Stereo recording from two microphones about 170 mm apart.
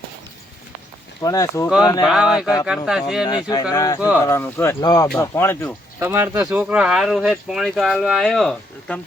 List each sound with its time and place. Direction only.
1.2 s speech: 20° left (ahead or behind)
2.0 s speech: 5° right (ahead or behind)
3.5 s speech: 20° left (ahead or behind)
6.0 s speech: 15° right (ahead or behind); by 9.0 s 5° left (ahead or behind)